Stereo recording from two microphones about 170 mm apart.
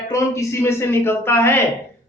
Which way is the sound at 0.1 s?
15° left (ahead or behind).